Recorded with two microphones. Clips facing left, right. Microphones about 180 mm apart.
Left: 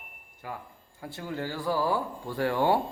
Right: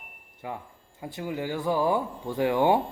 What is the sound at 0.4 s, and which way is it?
A man's voice, 20° right (ahead or behind).